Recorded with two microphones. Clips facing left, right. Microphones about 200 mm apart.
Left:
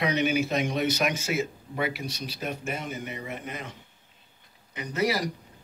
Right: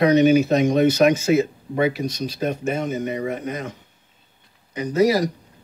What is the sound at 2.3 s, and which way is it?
Speech, 45° right (ahead or behind).